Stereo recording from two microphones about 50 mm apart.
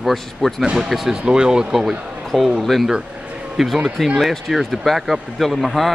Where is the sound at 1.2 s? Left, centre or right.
Centre.